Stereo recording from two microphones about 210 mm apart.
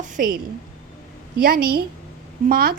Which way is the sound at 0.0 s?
40° right (ahead or behind).